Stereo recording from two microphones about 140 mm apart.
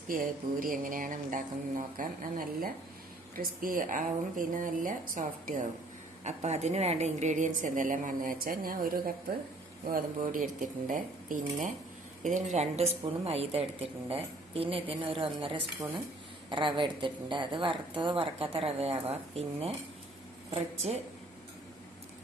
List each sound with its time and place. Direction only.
0.1 s a woman's voice: 90° right; by 5.6 s 70° right (ahead or behind)
6.2 s a woman's voice: 55° right (ahead or behind)